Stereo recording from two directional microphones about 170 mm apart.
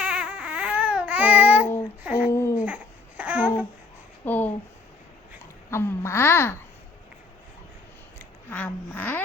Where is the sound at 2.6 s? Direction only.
10° right (ahead or behind).